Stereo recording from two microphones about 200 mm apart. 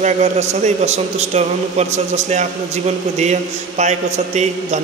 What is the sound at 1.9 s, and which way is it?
A man's voice, 35° right (ahead or behind).